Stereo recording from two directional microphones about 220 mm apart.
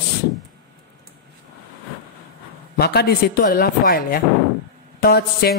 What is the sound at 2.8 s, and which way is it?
Speech, 45° left (ahead or behind).